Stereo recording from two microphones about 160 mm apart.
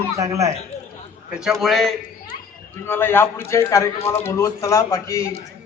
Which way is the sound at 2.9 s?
15° left (ahead or behind).